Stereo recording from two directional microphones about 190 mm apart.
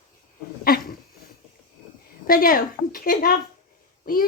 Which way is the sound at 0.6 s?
50° left (ahead or behind).